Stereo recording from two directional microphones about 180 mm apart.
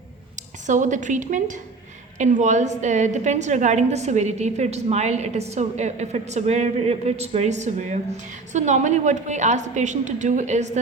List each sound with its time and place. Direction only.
0.7 s a woman's voice: 45° right (ahead or behind)